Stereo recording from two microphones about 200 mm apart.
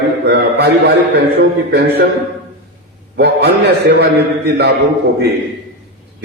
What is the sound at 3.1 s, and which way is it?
A man's voice, 55° right (ahead or behind).